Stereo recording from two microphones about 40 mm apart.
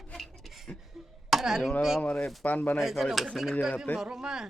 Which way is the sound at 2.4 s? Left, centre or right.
Left.